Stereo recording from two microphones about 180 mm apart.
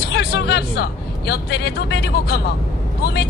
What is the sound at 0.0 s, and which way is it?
Speech, 65° left (ahead or behind).